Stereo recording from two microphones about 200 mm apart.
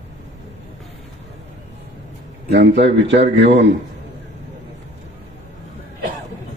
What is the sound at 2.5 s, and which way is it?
A man's voice, 60° right (ahead or behind).